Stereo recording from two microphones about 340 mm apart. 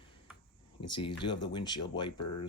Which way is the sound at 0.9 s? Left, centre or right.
Centre.